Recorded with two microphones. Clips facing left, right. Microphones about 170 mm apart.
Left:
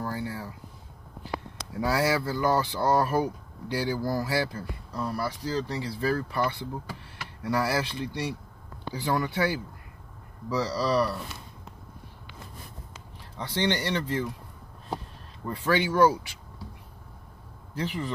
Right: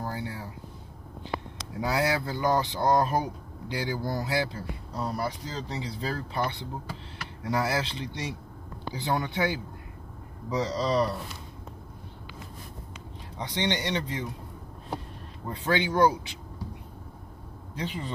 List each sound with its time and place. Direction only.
0.0 s a sound: 20° right (ahead or behind)
1.8 s speech: 20° right (ahead or behind)
13.4 s speech: 20° right (ahead or behind)
15.4 s speech: 20° right (ahead or behind)
17.7 s speech: 20° right (ahead or behind)